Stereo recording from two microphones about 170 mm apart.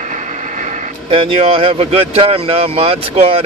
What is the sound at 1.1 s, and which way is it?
Speech, 30° right (ahead or behind).